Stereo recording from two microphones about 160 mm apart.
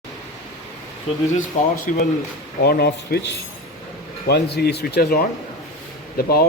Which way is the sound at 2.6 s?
80° left.